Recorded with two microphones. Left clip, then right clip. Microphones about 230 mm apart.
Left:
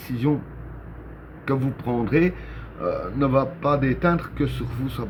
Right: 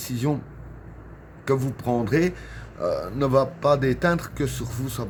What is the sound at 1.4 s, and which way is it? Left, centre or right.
A man's voice, right.